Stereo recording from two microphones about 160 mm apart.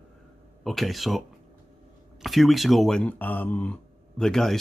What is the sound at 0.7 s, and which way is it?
Speech, centre (ahead or behind).